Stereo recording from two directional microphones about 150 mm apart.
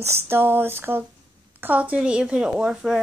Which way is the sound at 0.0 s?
15° right (ahead or behind).